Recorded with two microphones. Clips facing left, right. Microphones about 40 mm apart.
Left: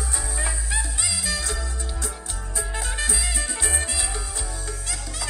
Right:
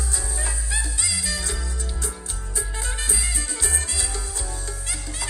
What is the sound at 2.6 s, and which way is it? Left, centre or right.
Music, left.